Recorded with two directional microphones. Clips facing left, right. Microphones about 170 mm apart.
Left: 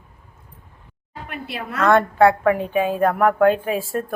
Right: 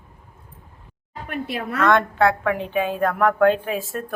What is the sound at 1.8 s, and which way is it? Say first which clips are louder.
A woman's voice: left 3 dB; 10° left (ahead or behind).